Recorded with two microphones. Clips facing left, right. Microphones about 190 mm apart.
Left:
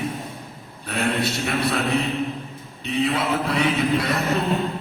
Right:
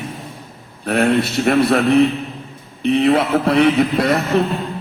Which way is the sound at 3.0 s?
55° right (ahead or behind).